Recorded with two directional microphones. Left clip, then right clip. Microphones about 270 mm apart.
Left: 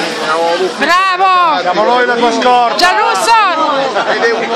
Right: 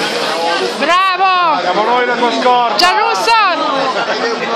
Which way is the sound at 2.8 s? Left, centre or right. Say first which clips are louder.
Left 1 dB; centre.